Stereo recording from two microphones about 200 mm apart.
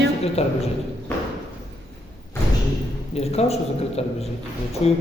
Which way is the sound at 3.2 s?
30° left (ahead or behind).